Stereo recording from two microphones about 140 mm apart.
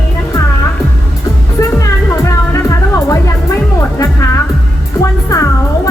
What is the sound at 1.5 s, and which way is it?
Music, 20° left (ahead or behind).